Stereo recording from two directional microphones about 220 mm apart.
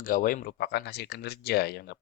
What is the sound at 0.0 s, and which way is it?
Speech, 40° left (ahead or behind).